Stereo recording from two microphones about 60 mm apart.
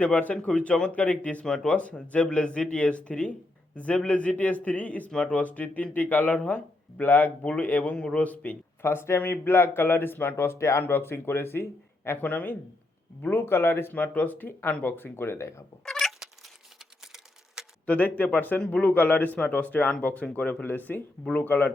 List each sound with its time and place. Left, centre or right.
0.0 s speech: left
8.8 s speech: left
10.9 s speech: left
12.1 s speech: left
13.9 s speech: left
15.9 s cat: centre
17.1 s typing: centre
17.8 s speech: left